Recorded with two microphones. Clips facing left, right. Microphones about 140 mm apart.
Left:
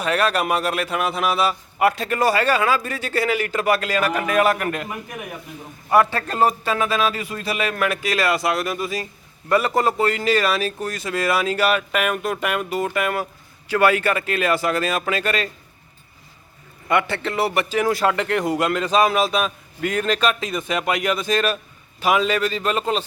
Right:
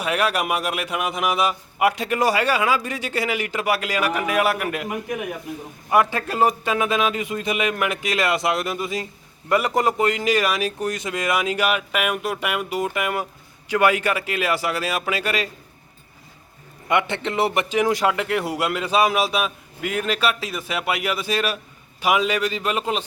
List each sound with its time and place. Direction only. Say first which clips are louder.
0.0 s a man's voice: left 2 dB; 10° right (ahead or behind)
5.9 s a man's voice: left 2 dB; 15° right (ahead or behind)
16.9 s a man's voice: left 1 dB; 20° right (ahead or behind)